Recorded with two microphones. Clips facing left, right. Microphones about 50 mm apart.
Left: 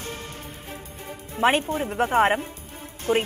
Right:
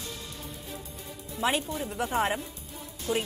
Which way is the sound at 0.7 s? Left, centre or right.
Left.